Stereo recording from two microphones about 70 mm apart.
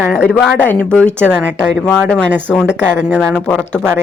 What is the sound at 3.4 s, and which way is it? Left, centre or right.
Speech, centre.